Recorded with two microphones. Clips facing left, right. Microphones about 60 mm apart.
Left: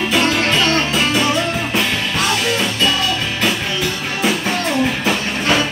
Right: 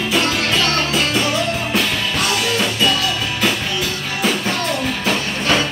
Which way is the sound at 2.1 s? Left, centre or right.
Centre.